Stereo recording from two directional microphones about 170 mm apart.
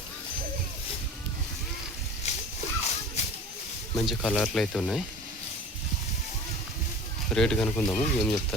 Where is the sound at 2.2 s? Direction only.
40° left (ahead or behind).